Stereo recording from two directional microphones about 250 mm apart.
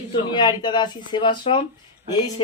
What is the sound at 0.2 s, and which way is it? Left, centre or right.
Speech, centre.